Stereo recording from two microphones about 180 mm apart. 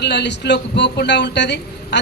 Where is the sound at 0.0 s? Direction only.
70° left (ahead or behind).